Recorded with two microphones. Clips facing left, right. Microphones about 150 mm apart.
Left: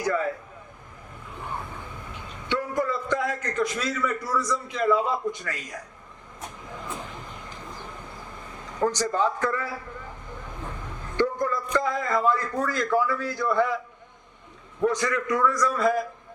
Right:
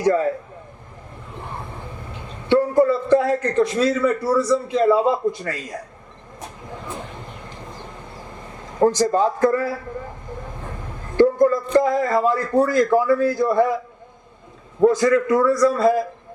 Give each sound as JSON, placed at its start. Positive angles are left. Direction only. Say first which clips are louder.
{"t": 0.0, "sound": "speech", "louder": "right 8 dB", "side_deg": -35}
{"t": 2.5, "sound": "a man's voice", "louder": "right 11 dB", "side_deg": -30}
{"t": 8.8, "sound": "a man's voice", "louder": "right 7 dB", "side_deg": -35}
{"t": 11.2, "sound": "a man's voice", "louder": "right 10 dB", "side_deg": -40}
{"t": 14.8, "sound": "a man's voice", "louder": "right 9 dB", "side_deg": -35}